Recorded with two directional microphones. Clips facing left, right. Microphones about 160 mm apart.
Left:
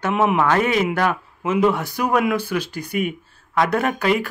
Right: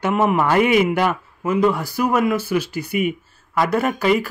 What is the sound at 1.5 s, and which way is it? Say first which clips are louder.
A man's voice: even; centre (ahead or behind).